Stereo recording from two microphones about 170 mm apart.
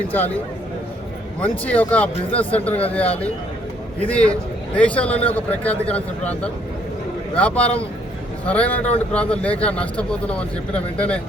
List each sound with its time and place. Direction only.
0.1 s speech: 10° left (ahead or behind)
4.0 s speech: 5° left (ahead or behind)